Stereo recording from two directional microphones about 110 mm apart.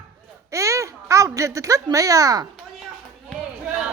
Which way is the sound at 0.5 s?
30° right (ahead or behind).